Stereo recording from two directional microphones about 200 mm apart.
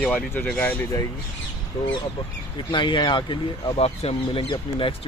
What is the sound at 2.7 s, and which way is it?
Speech, 25° left (ahead or behind).